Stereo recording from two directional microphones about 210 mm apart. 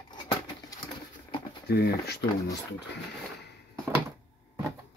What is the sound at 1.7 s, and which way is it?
Speech, 50° left (ahead or behind).